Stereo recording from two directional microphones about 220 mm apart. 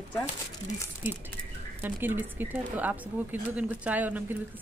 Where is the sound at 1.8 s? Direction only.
10° right (ahead or behind).